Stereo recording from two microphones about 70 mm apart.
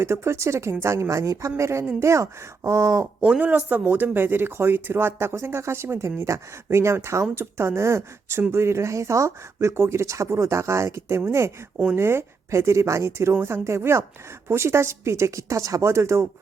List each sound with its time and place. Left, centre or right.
0.0 s speech: right
3.2 s a woman's voice: centre; by 16.2 s right